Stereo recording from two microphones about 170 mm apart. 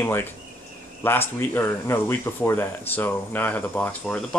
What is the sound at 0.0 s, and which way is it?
Speech, 15° left (ahead or behind).